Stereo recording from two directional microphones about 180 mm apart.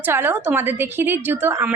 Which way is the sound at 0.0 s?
10° right (ahead or behind).